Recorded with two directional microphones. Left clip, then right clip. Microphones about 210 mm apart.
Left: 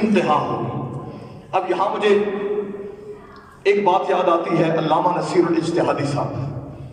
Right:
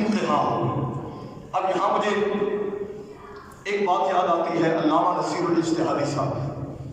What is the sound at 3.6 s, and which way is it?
A man's voice, 55° left (ahead or behind).